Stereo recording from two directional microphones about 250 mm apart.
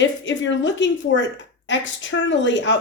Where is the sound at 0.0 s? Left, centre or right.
Left.